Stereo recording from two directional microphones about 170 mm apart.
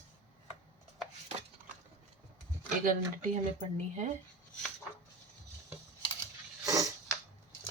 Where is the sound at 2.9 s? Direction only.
55° right (ahead or behind).